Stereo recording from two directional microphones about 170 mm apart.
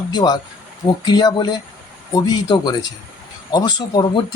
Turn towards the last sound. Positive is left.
turn(degrees=25)  # may be behind; listen again after turning